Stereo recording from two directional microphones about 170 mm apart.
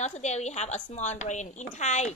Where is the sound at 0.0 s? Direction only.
40° left (ahead or behind).